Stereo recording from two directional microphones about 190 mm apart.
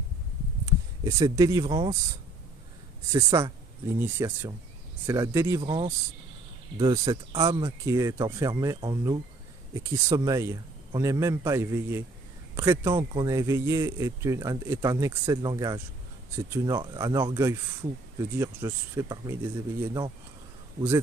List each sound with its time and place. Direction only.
0.7 s speech: 15° right (ahead or behind)
3.1 s speech: 15° right (ahead or behind)